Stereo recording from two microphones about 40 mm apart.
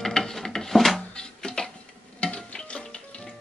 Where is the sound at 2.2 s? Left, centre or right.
Left.